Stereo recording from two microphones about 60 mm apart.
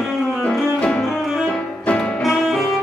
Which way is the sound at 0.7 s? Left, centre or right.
Centre.